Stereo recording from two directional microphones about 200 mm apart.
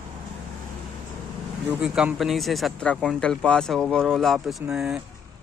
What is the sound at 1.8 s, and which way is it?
Speech, 5° right (ahead or behind).